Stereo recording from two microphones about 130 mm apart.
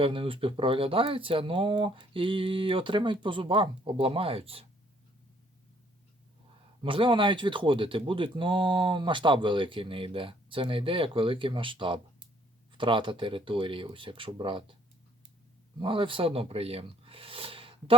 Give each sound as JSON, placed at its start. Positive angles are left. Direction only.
{"t": 0.0, "sound": "speech", "side_deg": -45}
{"t": 6.8, "sound": "speech", "side_deg": -40}
{"t": 15.8, "sound": "speech", "side_deg": -40}